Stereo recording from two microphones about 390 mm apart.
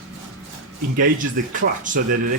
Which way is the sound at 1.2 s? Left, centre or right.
Centre.